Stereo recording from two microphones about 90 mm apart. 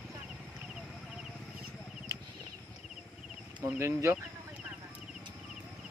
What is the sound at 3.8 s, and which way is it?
Speech, 30° right (ahead or behind).